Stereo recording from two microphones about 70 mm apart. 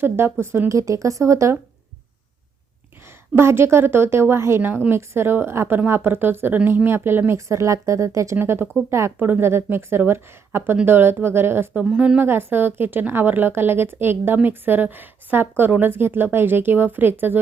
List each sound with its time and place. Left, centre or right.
0.0 s a woman's voice: right
0.7 s speech: right
3.3 s a woman's voice: right
4.6 s a woman's voice: right
8.4 s a woman's voice: right
11.7 s speech: centre
12.2 s a woman's voice: right